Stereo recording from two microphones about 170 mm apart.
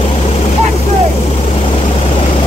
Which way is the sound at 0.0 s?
35° left (ahead or behind).